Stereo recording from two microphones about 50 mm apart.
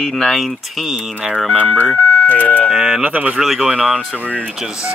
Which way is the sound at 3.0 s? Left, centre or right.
Right.